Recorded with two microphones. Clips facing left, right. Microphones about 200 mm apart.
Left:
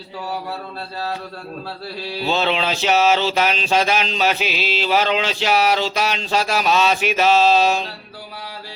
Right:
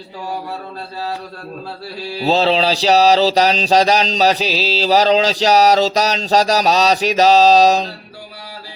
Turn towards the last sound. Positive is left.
turn(degrees=-40)  # may be behind; listen again after turning